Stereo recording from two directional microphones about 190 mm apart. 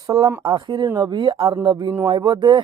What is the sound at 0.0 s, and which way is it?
Speech, 15° right (ahead or behind).